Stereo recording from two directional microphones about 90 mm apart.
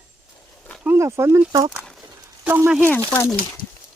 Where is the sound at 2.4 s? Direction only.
25° right (ahead or behind).